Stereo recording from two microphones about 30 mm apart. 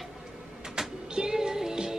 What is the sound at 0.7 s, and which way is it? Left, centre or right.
Music, right.